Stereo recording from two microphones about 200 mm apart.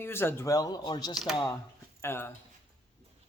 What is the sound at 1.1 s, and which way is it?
Speech, centre (ahead or behind).